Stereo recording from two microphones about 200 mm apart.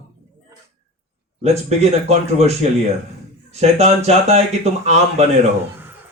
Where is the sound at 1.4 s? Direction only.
30° right (ahead or behind).